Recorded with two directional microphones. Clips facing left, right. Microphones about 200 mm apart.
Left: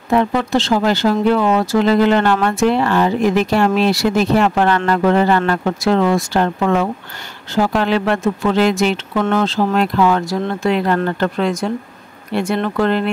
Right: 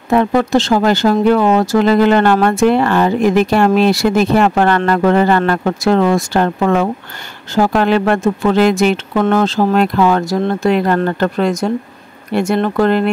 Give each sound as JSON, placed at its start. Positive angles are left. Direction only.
{"t": 0.1, "sound": "speech", "side_deg": -50}